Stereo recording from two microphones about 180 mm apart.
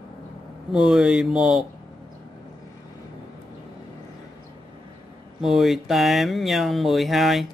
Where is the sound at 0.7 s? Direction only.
5° right (ahead or behind).